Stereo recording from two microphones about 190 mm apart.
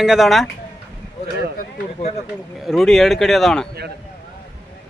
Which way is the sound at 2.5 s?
Centre (ahead or behind).